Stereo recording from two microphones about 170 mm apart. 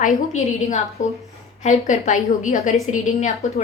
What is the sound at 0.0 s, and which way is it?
A woman's voice, 45° left (ahead or behind).